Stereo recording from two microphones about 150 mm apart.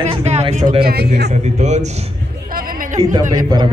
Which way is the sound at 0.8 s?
90° right.